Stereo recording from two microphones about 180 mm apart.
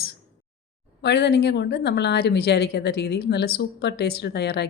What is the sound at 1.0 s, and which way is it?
A woman's voice, 65° left (ahead or behind).